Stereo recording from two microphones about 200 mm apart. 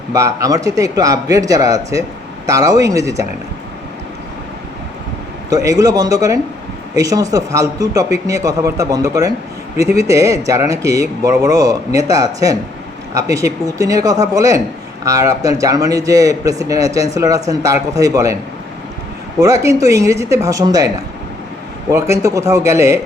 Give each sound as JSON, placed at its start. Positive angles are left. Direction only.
{"t": 0.1, "sound": "speech", "side_deg": -15}
{"t": 5.5, "sound": "speech", "side_deg": -15}
{"t": 19.4, "sound": "speech", "side_deg": -15}